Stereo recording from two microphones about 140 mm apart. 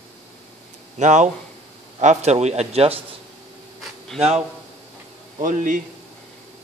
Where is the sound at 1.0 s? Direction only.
60° right (ahead or behind).